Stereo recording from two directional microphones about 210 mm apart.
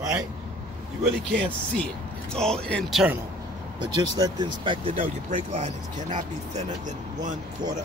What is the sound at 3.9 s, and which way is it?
Speech, 20° right (ahead or behind).